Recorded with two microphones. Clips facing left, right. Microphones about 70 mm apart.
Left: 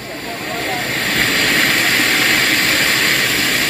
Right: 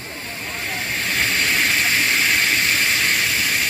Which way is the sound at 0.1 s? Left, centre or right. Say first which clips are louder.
Left 8 dB; left.